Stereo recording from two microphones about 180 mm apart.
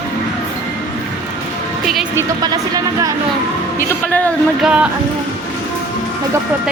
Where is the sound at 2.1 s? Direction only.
20° right (ahead or behind).